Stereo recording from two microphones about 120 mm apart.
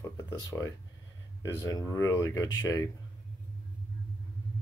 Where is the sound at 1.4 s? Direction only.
25° left (ahead or behind).